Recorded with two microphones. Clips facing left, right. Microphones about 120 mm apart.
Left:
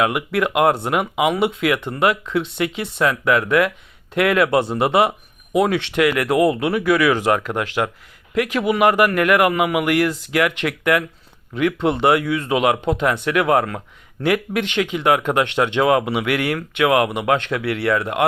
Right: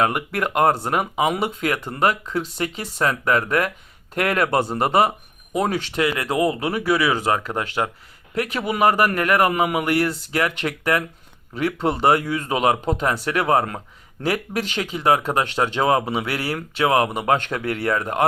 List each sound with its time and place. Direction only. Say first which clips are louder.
0.0 s speech: left 2 dB; 40° right (ahead or behind)